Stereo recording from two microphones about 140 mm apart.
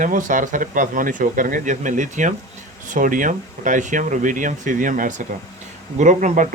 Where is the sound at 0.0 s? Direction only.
70° right (ahead or behind).